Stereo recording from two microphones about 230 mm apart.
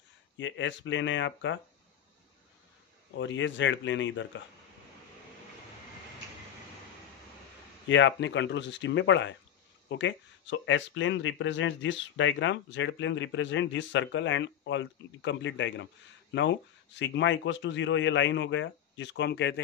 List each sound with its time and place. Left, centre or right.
0.4 s speech: left
3.2 s speech: left
7.9 s speech: left